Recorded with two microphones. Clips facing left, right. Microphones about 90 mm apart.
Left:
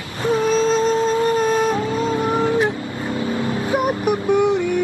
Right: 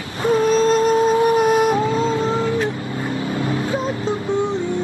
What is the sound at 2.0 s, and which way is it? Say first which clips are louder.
Cat: right 1 dB; 30° right (ahead or behind).